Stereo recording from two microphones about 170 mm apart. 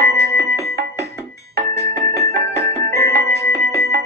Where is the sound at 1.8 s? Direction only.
20° left (ahead or behind).